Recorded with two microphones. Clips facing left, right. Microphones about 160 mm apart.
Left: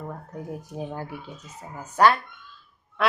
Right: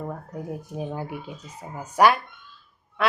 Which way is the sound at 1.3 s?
10° right (ahead or behind).